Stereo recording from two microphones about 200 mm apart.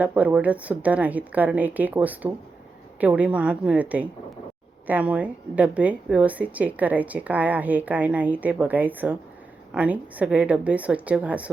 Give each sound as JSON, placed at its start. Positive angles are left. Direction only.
{"t": 0.0, "sound": "a woman's voice", "side_deg": -10}